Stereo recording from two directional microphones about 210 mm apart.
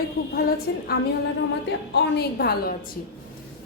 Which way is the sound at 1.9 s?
50° left (ahead or behind).